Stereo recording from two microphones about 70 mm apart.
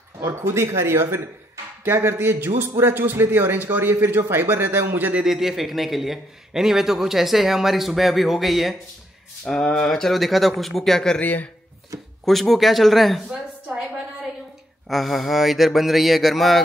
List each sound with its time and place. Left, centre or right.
0.2 s a man's voice: right
5.2 s a man's voice: centre
9.5 s a man's voice: centre
11.1 s speech: left
12.3 s a woman's voice: centre
14.9 s a man's voice: centre